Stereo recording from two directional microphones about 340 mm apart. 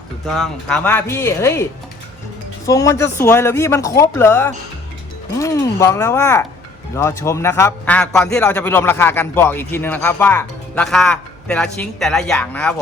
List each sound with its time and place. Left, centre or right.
0.3 s speech: centre
2.6 s a man's voice: centre